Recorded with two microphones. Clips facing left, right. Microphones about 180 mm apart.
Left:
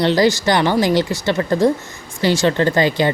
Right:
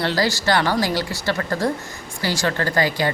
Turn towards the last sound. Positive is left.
turn(degrees=25)  # may be behind; listen again after turning